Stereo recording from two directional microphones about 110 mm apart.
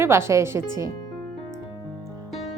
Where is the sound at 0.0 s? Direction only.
25° right (ahead or behind).